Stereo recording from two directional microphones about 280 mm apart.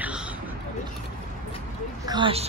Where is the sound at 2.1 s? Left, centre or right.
Centre.